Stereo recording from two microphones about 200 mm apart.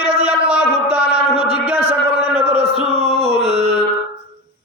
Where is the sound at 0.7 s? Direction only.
30° right (ahead or behind).